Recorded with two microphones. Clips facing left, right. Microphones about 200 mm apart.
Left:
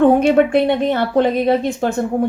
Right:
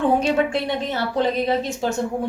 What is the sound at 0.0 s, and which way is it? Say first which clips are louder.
A woman's voice: left 7 dB; 55° left (ahead or behind).